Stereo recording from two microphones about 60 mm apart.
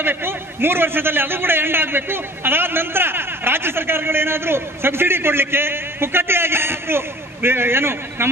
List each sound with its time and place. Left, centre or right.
0.0 s a man's voice: right